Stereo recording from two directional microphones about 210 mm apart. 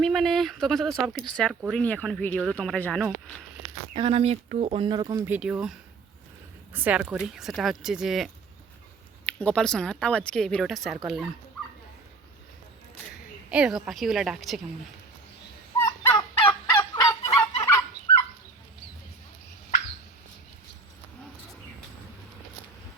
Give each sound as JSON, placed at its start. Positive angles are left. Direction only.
{"t": 0.0, "sound": "speech", "side_deg": 0}
{"t": 3.9, "sound": "speech", "side_deg": -25}
{"t": 5.2, "sound": "speech", "side_deg": -5}
{"t": 6.7, "sound": "speech", "side_deg": -5}
{"t": 13.5, "sound": "speech", "side_deg": -5}
{"t": 15.8, "sound": "fowl", "side_deg": 15}